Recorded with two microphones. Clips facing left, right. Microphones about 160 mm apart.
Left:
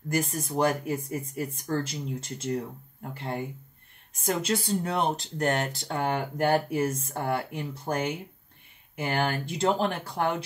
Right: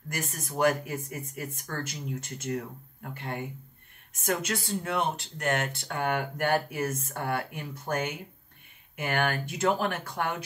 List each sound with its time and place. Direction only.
0.1 s speech: 30° left (ahead or behind)